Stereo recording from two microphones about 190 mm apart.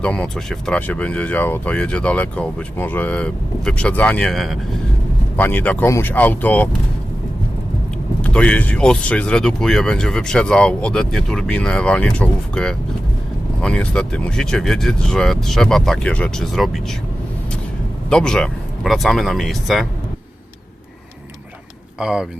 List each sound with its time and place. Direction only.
0.0 s speech: 5° left (ahead or behind)
8.2 s speech: 5° left (ahead or behind)
18.1 s speech: 5° left (ahead or behind)
21.9 s speech: 5° right (ahead or behind)